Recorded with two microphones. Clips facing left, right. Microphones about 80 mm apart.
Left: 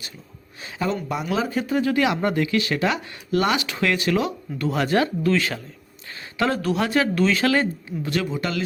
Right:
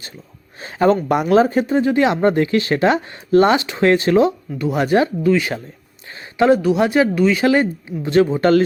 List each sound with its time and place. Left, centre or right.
0.6 s speech: right
4.5 s speech: centre; by 8.6 s right